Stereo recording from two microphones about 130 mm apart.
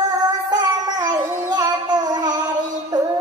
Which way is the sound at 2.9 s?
30° right (ahead or behind).